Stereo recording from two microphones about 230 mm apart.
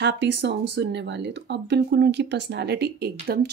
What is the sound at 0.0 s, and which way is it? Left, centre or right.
A woman's voice, right.